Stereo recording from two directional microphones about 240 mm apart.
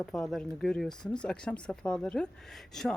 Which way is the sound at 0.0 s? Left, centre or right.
Centre.